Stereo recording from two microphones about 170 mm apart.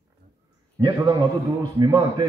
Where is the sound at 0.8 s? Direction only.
25° right (ahead or behind).